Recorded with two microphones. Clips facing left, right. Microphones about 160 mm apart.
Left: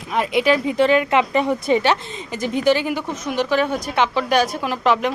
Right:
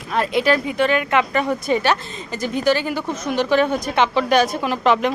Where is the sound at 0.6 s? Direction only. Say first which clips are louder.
Left 3 dB; 30° left (ahead or behind).